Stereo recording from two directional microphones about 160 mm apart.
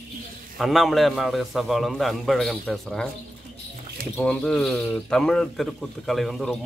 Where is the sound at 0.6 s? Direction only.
Centre (ahead or behind).